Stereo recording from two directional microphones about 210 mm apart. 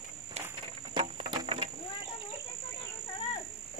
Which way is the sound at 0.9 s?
20° right (ahead or behind).